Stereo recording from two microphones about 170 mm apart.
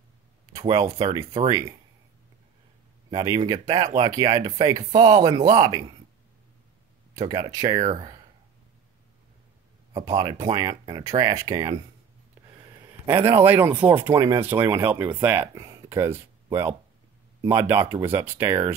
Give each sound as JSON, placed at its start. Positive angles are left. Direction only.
{"t": 0.5, "sound": "a sound", "side_deg": -20}
{"t": 0.9, "sound": "speech", "side_deg": -20}
{"t": 3.3, "sound": "speech", "side_deg": -25}
{"t": 7.2, "sound": "speech", "side_deg": -25}
{"t": 10.0, "sound": "speech", "side_deg": -25}
{"t": 13.0, "sound": "speech", "side_deg": -15}
{"t": 17.5, "sound": "speech", "side_deg": -10}